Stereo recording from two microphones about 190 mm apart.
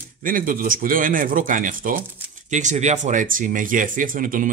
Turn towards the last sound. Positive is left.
turn(degrees=-45)  # may be behind; listen again after turning